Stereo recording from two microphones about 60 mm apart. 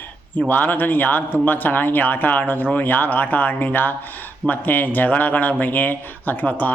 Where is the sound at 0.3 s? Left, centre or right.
Left.